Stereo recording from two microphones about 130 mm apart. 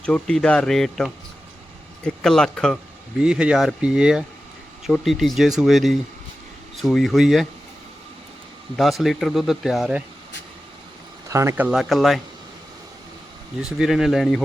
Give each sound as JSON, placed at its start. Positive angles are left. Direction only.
{"t": 0.0, "sound": "speech", "side_deg": 5}
{"t": 3.2, "sound": "speech", "side_deg": -5}
{"t": 8.7, "sound": "speech", "side_deg": 0}
{"t": 11.3, "sound": "speech", "side_deg": -20}
{"t": 11.8, "sound": "speech", "side_deg": 0}
{"t": 13.6, "sound": "speech", "side_deg": -5}